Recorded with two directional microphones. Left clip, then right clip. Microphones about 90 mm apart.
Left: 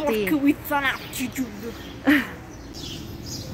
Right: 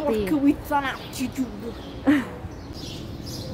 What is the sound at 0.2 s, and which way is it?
Speech, 15° right (ahead or behind).